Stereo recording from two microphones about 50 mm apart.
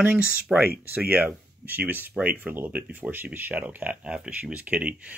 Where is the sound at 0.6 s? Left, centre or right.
Right.